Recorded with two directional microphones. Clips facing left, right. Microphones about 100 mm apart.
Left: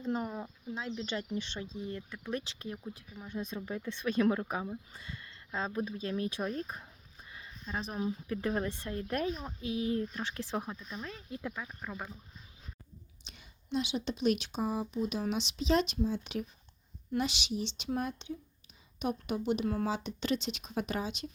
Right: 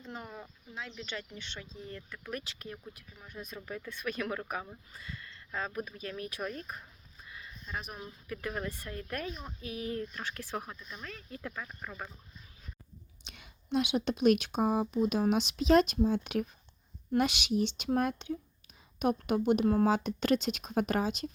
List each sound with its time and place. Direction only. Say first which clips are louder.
0.0 s a sound: left 10 dB; 30° left (ahead or behind)
0.7 s speech: left 5 dB; 30° left (ahead or behind)
1.8 s speech: left 4 dB; 20° left (ahead or behind)
13.2 s speech: right 5 dB; 65° right (ahead or behind); by 21.2 s 45° right (ahead or behind)